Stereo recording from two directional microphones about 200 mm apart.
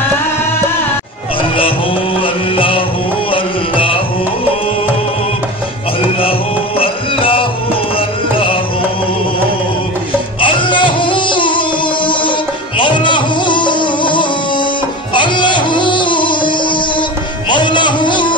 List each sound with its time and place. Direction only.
2.2 s music: 25° left (ahead or behind)
6.8 s music: 25° left (ahead or behind)
10.4 s music: 25° left (ahead or behind)